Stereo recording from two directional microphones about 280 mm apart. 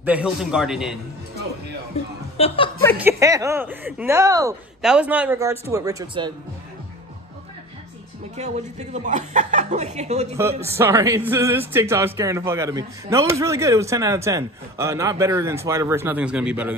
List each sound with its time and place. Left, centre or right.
0.0 s a man's voice: centre
2.3 s a woman's voice: centre
3.0 s a man's voice: centre
8.4 s a woman's voice: right
10.8 s a man's voice: centre